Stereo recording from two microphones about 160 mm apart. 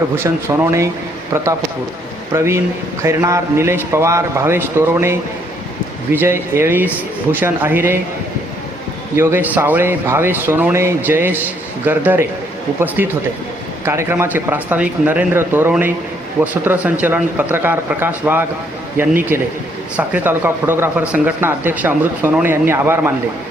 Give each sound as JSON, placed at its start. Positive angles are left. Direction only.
{"t": 0.2, "sound": "speech", "side_deg": -15}
{"t": 2.3, "sound": "speech", "side_deg": -15}
{"t": 9.1, "sound": "speech", "side_deg": -15}